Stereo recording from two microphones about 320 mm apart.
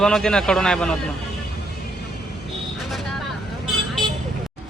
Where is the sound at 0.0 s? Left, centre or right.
Centre.